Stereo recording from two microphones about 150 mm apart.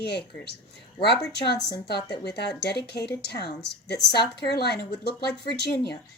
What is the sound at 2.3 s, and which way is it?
Speech, 90° left.